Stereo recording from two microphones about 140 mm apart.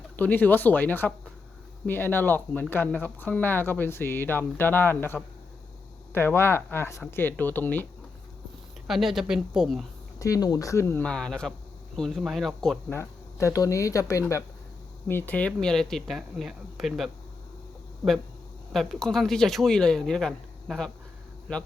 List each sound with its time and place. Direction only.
0.2 s speech: 10° left (ahead or behind)
8.9 s speech: centre (ahead or behind)
10.2 s speech: 25° left (ahead or behind)
11.0 s speech: 5° left (ahead or behind)
12.9 s speech: 20° left (ahead or behind)
15.0 s speech: 10° left (ahead or behind)
18.7 s speech: centre (ahead or behind)